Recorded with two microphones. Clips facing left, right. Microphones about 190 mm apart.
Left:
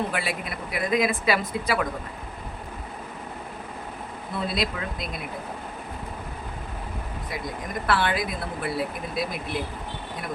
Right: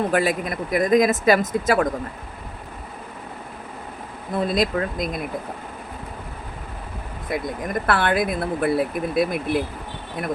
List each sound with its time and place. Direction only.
0.1 s speech: 45° right (ahead or behind)
4.4 s speech: 45° right (ahead or behind)
7.3 s speech: 55° right (ahead or behind)